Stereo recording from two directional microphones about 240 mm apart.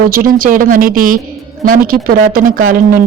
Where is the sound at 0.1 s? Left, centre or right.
Right.